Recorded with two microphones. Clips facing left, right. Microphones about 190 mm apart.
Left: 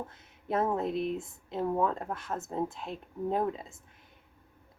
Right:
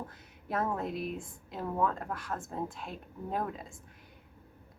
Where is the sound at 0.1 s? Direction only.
25° left (ahead or behind).